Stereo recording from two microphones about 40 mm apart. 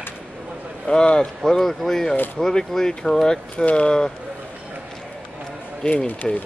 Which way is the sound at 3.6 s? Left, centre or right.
Left.